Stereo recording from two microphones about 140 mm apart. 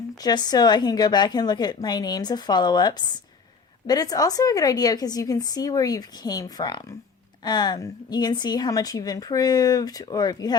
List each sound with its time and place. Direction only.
0.2 s speech: 30° left (ahead or behind)